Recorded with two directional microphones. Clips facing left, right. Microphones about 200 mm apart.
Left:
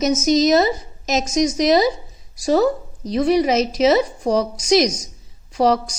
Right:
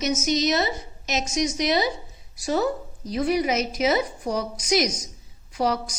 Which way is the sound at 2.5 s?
90° left.